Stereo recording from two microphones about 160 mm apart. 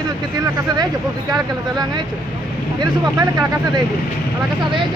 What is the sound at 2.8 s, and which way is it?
Speech, 25° right (ahead or behind).